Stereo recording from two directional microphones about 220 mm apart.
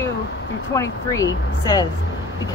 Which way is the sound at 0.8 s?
15° left (ahead or behind).